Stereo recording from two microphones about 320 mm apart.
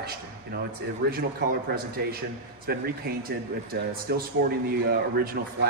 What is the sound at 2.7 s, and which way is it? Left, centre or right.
Speech, right.